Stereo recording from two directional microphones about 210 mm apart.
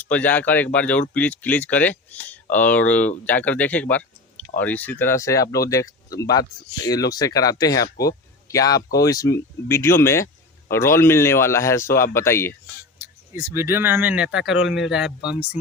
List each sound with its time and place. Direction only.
0.0 s speech: 5° left (ahead or behind)
13.3 s speech: 15° right (ahead or behind)